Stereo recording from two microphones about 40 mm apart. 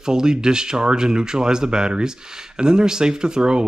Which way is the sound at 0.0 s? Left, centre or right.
Centre.